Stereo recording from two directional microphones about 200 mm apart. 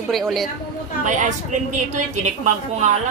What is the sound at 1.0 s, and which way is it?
A woman's voice, 40° right (ahead or behind).